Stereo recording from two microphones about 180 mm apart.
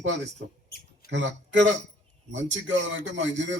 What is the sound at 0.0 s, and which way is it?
A man's voice, 75° right (ahead or behind).